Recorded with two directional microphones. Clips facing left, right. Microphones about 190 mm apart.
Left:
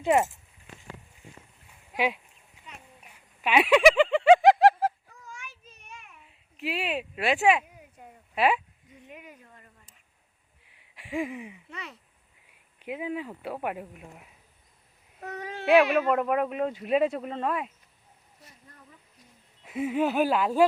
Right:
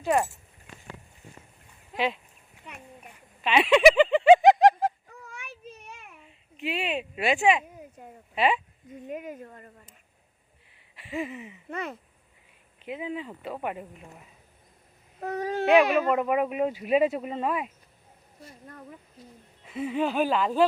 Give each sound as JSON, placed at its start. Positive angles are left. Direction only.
{"t": 0.0, "sound": "speech", "side_deg": 20}
{"t": 3.4, "sound": "a sound", "side_deg": 10}
{"t": 5.2, "sound": "a sound", "side_deg": -60}
{"t": 6.6, "sound": "speech", "side_deg": 0}
{"t": 8.9, "sound": "speech", "side_deg": -45}
{"t": 10.9, "sound": "a sound", "side_deg": 10}
{"t": 11.7, "sound": "speech", "side_deg": -50}
{"t": 12.8, "sound": "speech", "side_deg": 10}
{"t": 15.2, "sound": "speech", "side_deg": -35}
{"t": 16.0, "sound": "speech", "side_deg": 0}
{"t": 18.6, "sound": "a sound", "side_deg": -60}
{"t": 19.6, "sound": "speech", "side_deg": 10}